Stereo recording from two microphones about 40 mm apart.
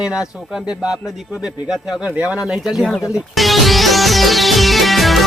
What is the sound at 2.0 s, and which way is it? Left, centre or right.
Speech, right.